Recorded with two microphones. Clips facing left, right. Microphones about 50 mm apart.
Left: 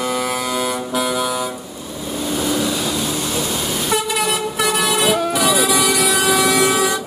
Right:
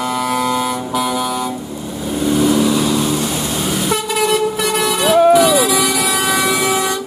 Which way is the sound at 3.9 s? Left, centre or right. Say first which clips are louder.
Right 3 dB; centre.